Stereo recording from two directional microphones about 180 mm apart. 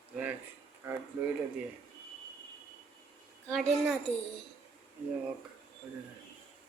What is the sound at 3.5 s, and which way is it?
Speech, centre (ahead or behind).